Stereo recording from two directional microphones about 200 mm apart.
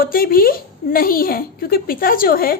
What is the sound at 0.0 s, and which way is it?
A woman's voice, 45° left (ahead or behind).